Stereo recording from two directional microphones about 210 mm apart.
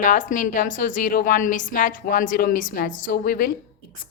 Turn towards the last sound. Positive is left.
turn(degrees=45)  # may be behind; listen again after turning